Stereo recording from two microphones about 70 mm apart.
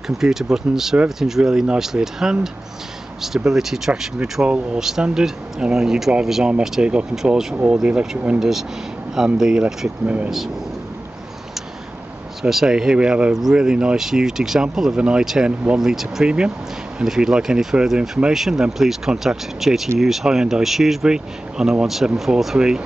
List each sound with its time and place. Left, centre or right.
0.2 s speech: centre
10.0 s speech: centre
12.4 s speech: centre